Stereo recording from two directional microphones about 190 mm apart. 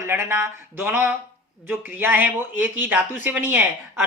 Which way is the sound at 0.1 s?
10° right (ahead or behind).